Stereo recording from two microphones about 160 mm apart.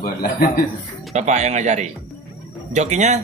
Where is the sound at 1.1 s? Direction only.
45° right (ahead or behind).